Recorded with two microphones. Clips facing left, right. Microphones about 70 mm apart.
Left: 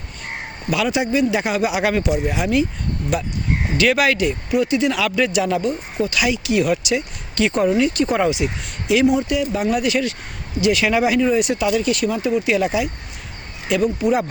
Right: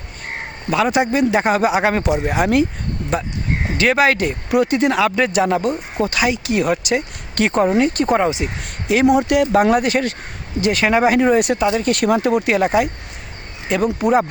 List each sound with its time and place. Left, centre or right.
0.7 s speech: right
2.0 s speech: right
3.8 s speech: right
4.9 s speech: right
8.4 s speech: right
8.9 s speech: right
11.6 s speech: right
11.9 s speech: right